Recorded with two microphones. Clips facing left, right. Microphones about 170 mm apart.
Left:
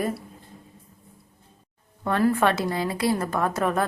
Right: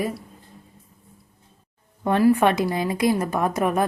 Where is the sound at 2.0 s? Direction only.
15° right (ahead or behind).